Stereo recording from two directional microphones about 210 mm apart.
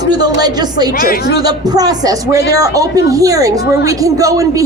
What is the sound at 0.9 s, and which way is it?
Speech, 45° left (ahead or behind).